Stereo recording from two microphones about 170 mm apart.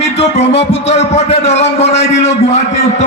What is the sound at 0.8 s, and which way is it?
A man's voice, 40° left (ahead or behind).